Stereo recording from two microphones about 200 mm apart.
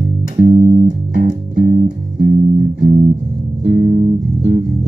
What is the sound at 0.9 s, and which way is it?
Music, 45° right (ahead or behind).